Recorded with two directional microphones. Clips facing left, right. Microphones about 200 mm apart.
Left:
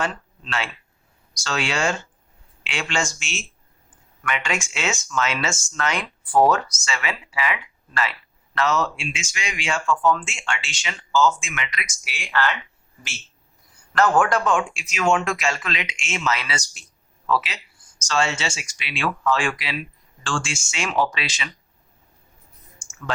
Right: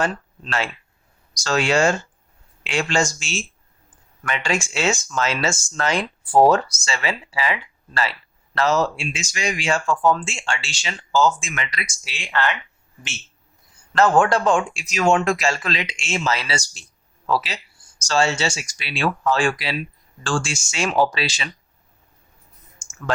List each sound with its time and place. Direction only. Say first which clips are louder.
0.0 s speech: right 4 dB; 40° right (ahead or behind); by 12.5 s 20° right (ahead or behind)
13.9 s speech: right 2 dB; 25° right (ahead or behind)